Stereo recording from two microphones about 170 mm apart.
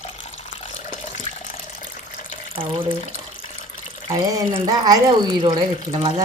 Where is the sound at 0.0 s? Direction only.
40° left (ahead or behind).